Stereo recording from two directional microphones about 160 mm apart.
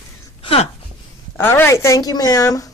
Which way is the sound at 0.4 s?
35° left (ahead or behind).